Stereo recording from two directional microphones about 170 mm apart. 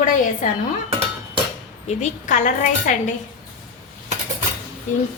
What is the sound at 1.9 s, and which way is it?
A woman's voice, 45° left (ahead or behind).